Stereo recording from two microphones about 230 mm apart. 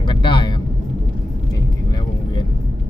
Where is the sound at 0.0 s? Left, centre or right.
Left.